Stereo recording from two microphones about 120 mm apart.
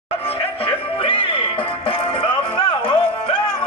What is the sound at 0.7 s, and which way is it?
Music, 50° left (ahead or behind).